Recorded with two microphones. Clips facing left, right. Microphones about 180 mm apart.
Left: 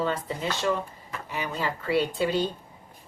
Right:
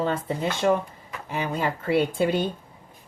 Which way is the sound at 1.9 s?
50° right (ahead or behind).